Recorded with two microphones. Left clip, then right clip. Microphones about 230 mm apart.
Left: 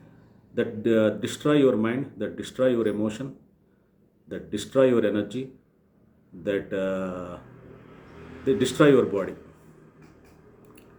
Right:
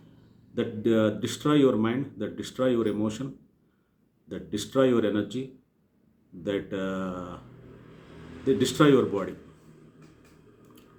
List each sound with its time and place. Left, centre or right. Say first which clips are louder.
0.5 s speech: left 2 dB; centre
4.3 s speech: left 2 dB; centre
8.4 s speech: left 2 dB; centre